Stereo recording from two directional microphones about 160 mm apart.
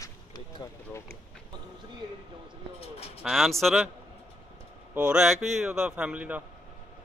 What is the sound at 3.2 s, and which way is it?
Speech, centre (ahead or behind).